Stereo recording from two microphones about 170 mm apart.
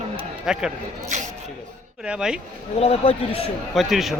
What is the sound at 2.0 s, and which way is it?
Speech, 5° right (ahead or behind).